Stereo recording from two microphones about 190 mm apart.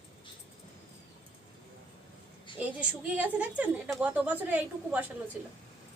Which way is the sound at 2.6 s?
5° right (ahead or behind).